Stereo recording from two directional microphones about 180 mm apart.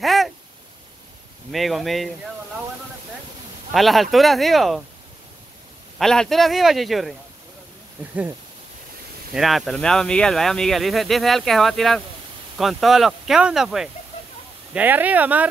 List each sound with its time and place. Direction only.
0.0 s a sound: centre (ahead or behind)
1.5 s speech: centre (ahead or behind)
3.7 s speech: centre (ahead or behind)
5.9 s speech: centre (ahead or behind)
9.3 s speech: centre (ahead or behind)